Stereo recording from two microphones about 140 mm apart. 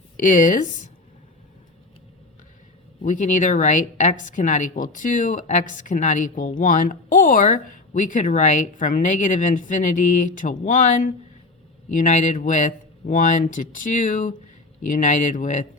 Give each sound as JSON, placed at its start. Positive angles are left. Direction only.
{"t": 0.2, "sound": "speech", "side_deg": 70}
{"t": 3.0, "sound": "a woman's voice", "side_deg": 65}